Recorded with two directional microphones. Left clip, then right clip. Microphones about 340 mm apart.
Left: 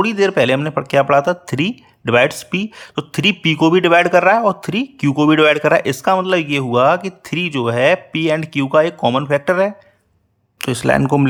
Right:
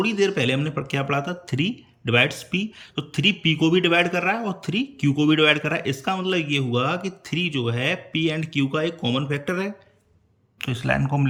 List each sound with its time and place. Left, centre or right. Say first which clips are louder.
0.0 s speech: left 7 dB; centre